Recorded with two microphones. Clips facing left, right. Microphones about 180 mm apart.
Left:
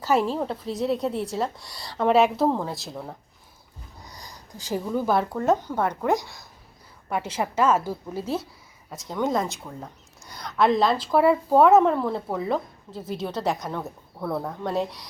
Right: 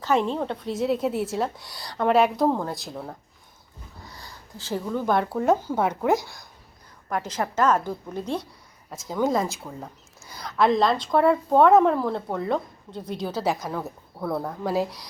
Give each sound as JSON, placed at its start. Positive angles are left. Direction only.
{"t": 0.0, "sound": "a woman's voice", "side_deg": 5}
{"t": 4.0, "sound": "a sound", "side_deg": 20}
{"t": 4.6, "sound": "a woman's voice", "side_deg": 10}